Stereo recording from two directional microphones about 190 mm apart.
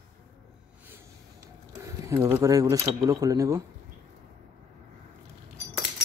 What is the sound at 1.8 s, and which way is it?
Speech, 15° right (ahead or behind).